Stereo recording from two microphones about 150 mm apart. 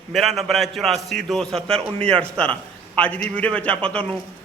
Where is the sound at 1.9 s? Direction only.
40° right (ahead or behind).